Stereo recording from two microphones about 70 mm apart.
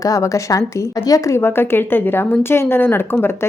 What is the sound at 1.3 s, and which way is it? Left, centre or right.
A woman's voice, left.